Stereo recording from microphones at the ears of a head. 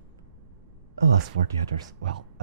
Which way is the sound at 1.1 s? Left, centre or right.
Right.